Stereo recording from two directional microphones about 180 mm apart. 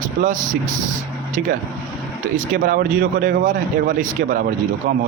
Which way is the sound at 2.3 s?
50° right (ahead or behind).